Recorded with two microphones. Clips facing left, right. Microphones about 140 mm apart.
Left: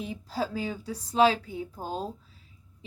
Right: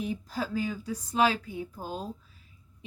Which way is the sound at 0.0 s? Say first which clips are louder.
Left 1 dB; 30° left (ahead or behind).